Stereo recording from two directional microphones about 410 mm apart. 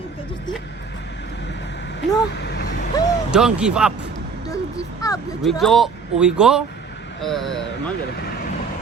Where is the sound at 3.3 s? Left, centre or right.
Centre.